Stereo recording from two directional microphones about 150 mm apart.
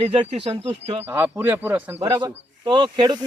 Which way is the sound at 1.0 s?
15° right (ahead or behind).